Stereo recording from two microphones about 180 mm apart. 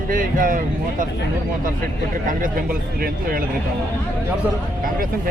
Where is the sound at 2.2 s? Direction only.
50° right (ahead or behind).